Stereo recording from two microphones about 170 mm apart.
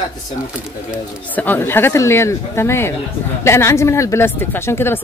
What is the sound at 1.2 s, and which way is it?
Speech, 10° left (ahead or behind).